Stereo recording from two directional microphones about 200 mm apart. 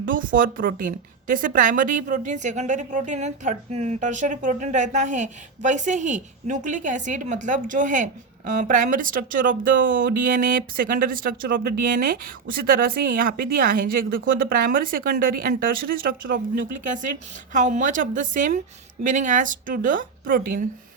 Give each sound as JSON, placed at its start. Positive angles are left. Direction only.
{"t": 0.1, "sound": "a woman's voice", "side_deg": -45}